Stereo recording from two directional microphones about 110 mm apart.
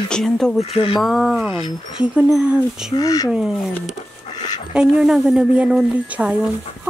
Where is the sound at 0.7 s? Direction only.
55° left (ahead or behind).